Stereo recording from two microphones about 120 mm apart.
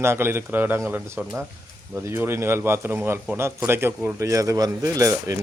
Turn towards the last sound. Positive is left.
turn(degrees=-30)  # may be behind; listen again after turning